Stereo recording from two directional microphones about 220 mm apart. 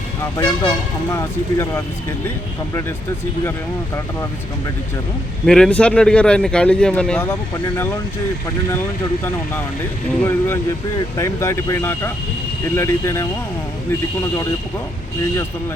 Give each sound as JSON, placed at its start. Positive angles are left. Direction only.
{"t": 0.3, "sound": "speech", "side_deg": 20}
{"t": 5.5, "sound": "speech", "side_deg": 5}
{"t": 10.2, "sound": "speech", "side_deg": 10}